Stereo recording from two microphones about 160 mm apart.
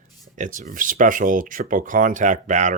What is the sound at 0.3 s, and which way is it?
Speech, 55° right (ahead or behind).